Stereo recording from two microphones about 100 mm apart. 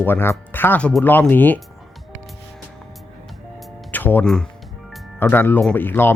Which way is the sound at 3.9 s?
20° left (ahead or behind).